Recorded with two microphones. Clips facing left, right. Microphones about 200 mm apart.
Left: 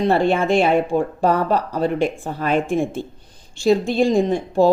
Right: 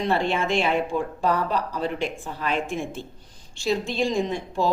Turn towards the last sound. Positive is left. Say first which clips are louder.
# left 8 dB
turn(degrees=50)  # may be behind; listen again after turning